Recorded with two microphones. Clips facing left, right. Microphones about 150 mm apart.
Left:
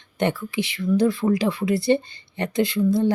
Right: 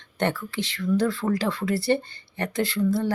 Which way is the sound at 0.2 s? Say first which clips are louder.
Left 3 dB; 15° left (ahead or behind).